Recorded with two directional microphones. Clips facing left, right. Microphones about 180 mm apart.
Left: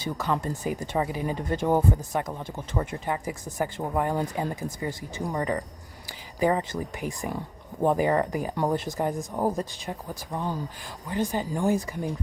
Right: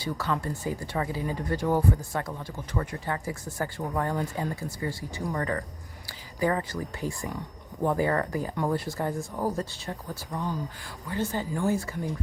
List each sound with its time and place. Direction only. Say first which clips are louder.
0.0 s speech: left 2 dB; 20° left (ahead or behind)
10.3 s speech: left 1 dB; 25° left (ahead or behind)